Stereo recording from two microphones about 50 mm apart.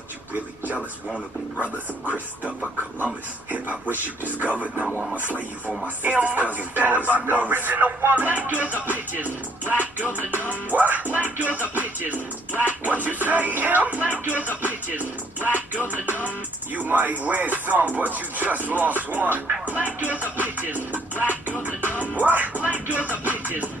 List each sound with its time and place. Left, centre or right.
1.6 s speech: right
3.5 s speech: right
19.6 s music: right
20.3 s speech: right
22.0 s music: right